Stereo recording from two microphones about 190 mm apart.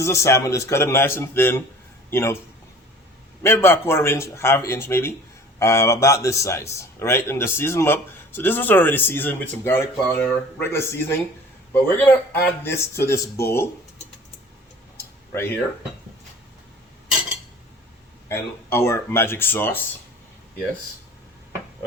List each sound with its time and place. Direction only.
0.0 s speech: 15° left (ahead or behind)
3.4 s speech: 10° left (ahead or behind)
14.9 s a sound: 10° left (ahead or behind)
18.3 s speech: 15° left (ahead or behind)